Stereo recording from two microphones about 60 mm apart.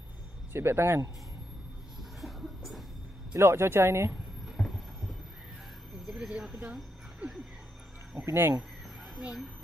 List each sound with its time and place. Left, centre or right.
0.5 s a man's voice: right
2.0 s vehicle: centre
3.3 s speech: right
4.6 s heart sounds: centre
6.0 s speech: centre
8.3 s a man's voice: right